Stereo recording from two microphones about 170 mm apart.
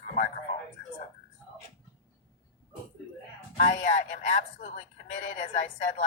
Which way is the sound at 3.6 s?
45° left (ahead or behind).